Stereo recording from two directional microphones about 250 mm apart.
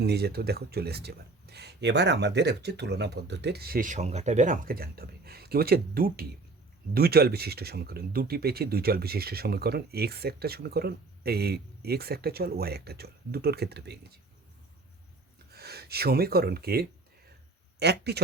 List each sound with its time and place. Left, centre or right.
0.0 s speech: right
15.5 s speech: right